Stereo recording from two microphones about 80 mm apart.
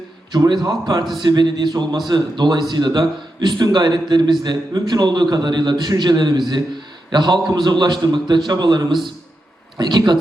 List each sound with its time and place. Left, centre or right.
0.3 s a man's voice: right